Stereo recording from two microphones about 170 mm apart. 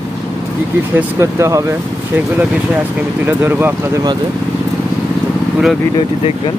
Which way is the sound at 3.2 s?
10° right (ahead or behind).